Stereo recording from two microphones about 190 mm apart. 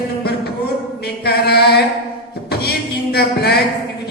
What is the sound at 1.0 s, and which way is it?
Chant, 55° left (ahead or behind).